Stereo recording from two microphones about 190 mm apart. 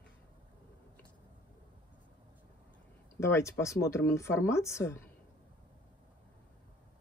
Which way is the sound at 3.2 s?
15° left (ahead or behind).